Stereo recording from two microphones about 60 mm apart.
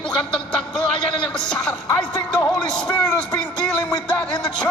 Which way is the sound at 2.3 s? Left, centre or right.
Centre.